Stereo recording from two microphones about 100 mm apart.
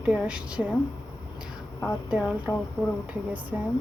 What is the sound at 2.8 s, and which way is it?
Speech, 15° right (ahead or behind).